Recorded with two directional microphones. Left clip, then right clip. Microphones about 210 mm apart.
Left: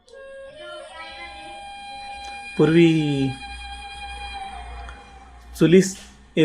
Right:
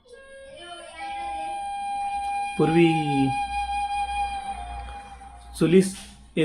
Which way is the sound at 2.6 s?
10° left (ahead or behind).